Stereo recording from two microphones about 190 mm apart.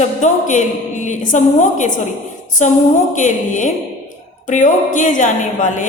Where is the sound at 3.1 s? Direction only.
40° left (ahead or behind).